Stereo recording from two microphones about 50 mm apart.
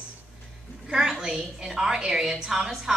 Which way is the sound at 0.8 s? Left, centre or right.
Centre.